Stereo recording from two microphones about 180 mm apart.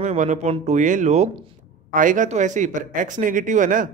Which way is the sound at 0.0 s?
40° right (ahead or behind).